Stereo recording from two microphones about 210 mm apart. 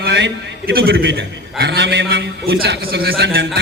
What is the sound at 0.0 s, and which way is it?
A man's voice, 50° right (ahead or behind).